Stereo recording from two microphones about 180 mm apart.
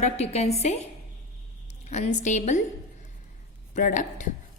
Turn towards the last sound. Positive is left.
turn(degrees=45)  # may be behind; listen again after turning